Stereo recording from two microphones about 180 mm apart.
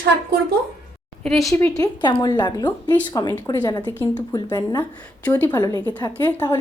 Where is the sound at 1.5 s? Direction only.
15° left (ahead or behind).